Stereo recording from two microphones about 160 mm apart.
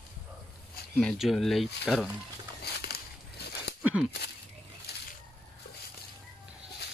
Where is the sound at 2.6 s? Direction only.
85° left.